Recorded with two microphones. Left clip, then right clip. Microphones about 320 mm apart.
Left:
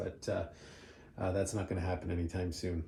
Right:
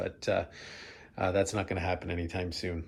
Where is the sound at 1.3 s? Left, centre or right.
Centre.